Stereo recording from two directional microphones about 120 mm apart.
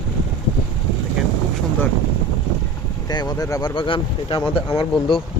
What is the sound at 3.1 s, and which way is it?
Speech, 35° left (ahead or behind).